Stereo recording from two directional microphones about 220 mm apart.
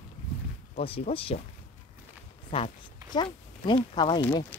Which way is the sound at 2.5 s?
30° left (ahead or behind).